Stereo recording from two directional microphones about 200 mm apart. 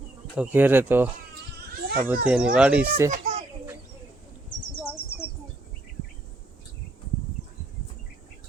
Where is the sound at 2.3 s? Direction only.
5° right (ahead or behind).